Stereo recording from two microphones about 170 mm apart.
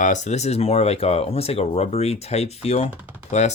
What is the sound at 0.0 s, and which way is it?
Speech, 45° left (ahead or behind).